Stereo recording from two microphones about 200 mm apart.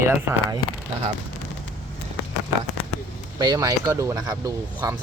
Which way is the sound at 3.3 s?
20° right (ahead or behind).